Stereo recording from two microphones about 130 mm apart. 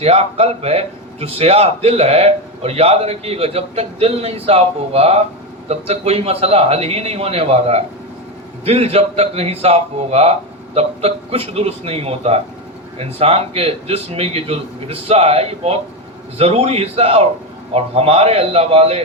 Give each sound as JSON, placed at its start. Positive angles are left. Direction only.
{"t": 0.0, "sound": "a man's voice", "side_deg": -50}